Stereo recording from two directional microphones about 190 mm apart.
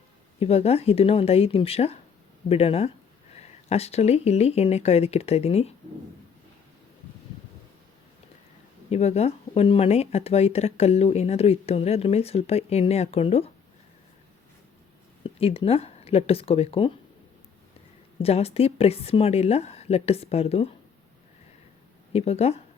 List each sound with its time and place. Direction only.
0.3 s speech: 35° left (ahead or behind)
8.9 s speech: 35° left (ahead or behind)
15.2 s speech: 30° left (ahead or behind)
18.2 s speech: 30° left (ahead or behind)
22.1 s speech: 35° left (ahead or behind)